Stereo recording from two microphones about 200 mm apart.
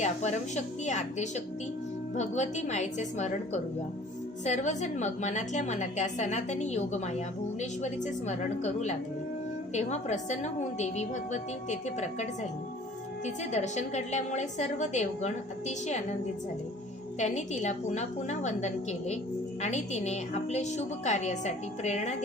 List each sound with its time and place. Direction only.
0.0 s a woman's voice: 35° left (ahead or behind)
17.2 s a woman's voice: 35° left (ahead or behind)